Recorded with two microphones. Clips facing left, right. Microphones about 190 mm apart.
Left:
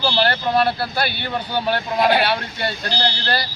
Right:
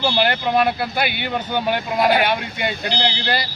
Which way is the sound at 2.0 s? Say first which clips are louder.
Even; centre (ahead or behind).